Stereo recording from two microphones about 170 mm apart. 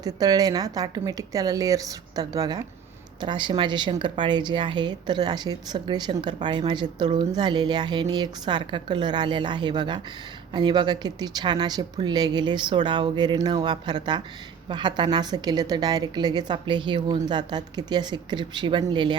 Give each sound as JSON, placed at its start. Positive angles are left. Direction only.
{"t": 0.0, "sound": "speech", "side_deg": -20}